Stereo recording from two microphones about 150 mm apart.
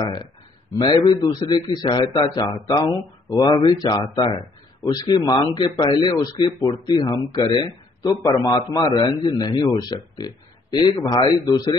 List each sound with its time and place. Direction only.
0.7 s a man's voice: 30° left (ahead or behind)